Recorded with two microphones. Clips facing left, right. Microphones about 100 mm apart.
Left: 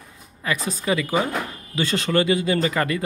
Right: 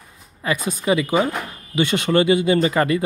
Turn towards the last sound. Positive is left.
turn(degrees=-25)  # may be behind; listen again after turning